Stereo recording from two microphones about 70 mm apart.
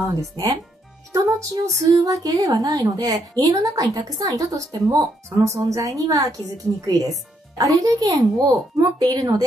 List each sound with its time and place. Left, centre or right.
0.1 s a woman's voice: right
5.4 s a woman's voice: right